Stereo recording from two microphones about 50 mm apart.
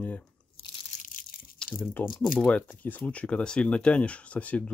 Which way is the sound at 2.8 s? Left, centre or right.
Left.